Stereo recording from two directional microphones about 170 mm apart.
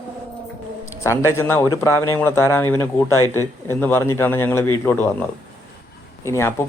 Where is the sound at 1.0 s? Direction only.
15° left (ahead or behind).